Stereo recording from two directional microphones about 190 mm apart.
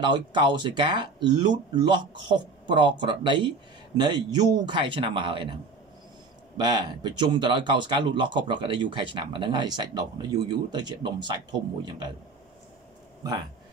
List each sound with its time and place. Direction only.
0.0 s speech: 25° right (ahead or behind)